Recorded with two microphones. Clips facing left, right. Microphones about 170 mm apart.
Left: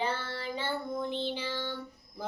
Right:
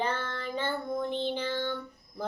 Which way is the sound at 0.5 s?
10° left (ahead or behind).